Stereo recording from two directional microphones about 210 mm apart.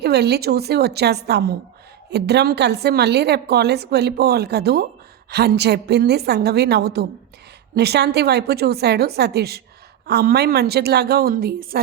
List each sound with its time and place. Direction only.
0.0 s a woman's voice: 50° right (ahead or behind)